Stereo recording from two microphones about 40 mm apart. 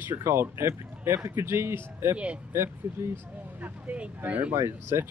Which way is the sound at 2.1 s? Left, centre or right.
Right.